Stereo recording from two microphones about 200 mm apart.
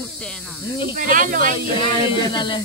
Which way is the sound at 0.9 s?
40° right (ahead or behind).